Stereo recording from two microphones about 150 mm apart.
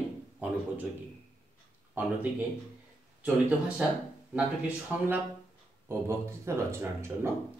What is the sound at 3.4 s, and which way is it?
Speech, 10° right (ahead or behind).